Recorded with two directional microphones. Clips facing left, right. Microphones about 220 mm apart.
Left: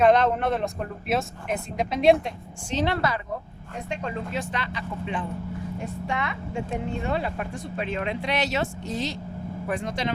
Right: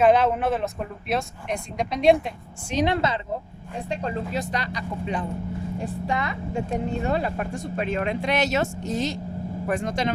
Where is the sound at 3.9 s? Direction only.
35° right (ahead or behind).